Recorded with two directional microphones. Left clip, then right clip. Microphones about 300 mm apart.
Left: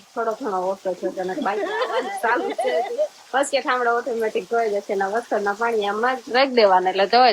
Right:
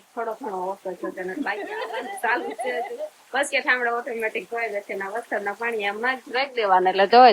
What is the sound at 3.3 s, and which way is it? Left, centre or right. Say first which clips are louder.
Speech: right 1 dB; centre.